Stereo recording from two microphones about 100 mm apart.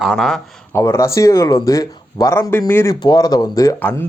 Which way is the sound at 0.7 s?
30° left (ahead or behind).